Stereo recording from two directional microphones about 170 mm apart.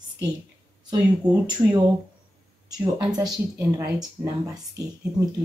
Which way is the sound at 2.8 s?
20° right (ahead or behind).